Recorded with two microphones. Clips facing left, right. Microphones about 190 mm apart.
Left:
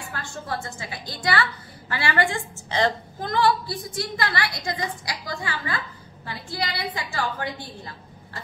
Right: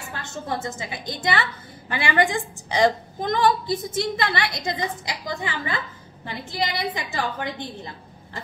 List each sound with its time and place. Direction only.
0.1 s a woman's voice: 20° right (ahead or behind)